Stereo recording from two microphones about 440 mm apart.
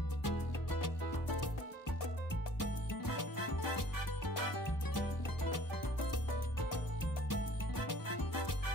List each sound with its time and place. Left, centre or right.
0.2 s music: left
2.6 s music: left
7.8 s music: left